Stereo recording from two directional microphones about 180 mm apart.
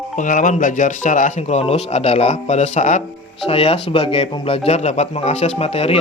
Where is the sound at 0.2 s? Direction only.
45° left (ahead or behind).